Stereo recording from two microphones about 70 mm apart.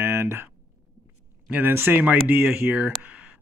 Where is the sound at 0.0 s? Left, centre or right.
Right.